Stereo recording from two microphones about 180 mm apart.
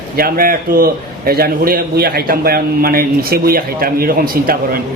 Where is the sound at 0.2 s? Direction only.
55° right (ahead or behind).